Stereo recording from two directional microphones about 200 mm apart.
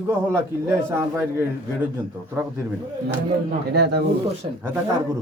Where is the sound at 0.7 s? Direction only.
15° right (ahead or behind).